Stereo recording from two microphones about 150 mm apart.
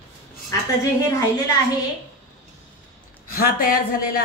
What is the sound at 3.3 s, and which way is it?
Speech, 75° left (ahead or behind).